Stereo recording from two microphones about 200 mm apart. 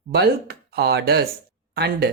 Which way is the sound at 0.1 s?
55° right (ahead or behind).